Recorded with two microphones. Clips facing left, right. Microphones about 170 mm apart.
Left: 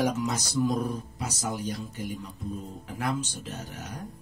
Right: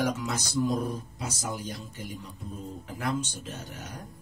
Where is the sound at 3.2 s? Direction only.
35° left (ahead or behind).